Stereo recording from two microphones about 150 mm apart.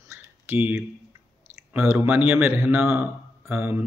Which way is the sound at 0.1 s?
10° right (ahead or behind).